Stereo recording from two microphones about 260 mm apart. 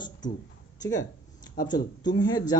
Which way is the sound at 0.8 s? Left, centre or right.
Centre.